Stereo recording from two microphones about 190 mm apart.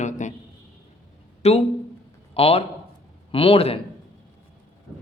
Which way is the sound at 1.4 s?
35° left (ahead or behind).